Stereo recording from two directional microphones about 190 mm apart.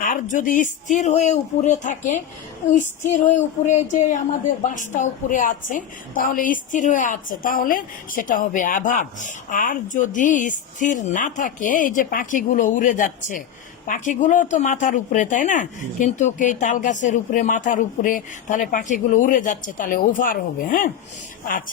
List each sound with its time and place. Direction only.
0.0 s a woman's voice: 45° left (ahead or behind)